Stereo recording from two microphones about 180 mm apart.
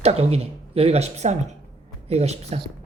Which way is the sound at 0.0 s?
35° right (ahead or behind).